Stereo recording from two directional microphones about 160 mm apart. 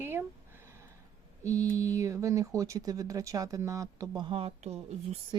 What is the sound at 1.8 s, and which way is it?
Speech, 20° right (ahead or behind).